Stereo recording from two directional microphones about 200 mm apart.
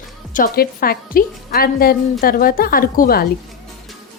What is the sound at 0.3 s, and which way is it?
A woman's voice, 45° left (ahead or behind).